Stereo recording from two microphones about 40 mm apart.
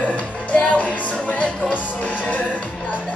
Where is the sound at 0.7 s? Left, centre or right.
Left.